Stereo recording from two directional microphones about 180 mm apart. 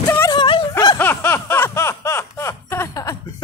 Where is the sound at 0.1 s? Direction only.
15° left (ahead or behind).